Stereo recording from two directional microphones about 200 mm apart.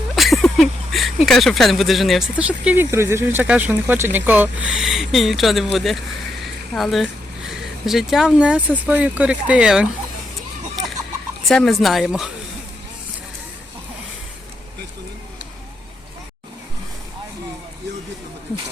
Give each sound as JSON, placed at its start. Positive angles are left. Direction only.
{"t": 0.2, "sound": "a sound", "side_deg": 0}
{"t": 2.3, "sound": "speech", "side_deg": -5}
{"t": 11.4, "sound": "speech", "side_deg": 0}